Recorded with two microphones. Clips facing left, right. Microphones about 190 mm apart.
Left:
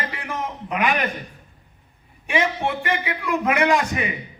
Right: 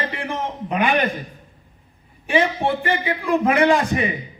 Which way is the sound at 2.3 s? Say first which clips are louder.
Right 3 dB; 35° right (ahead or behind).